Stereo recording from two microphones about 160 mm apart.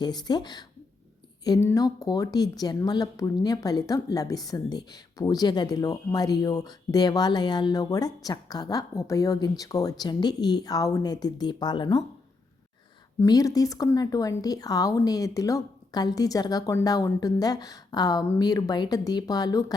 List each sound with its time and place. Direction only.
0.0 s a woman's voice: 25° left (ahead or behind)
13.1 s a woman's voice: 20° left (ahead or behind)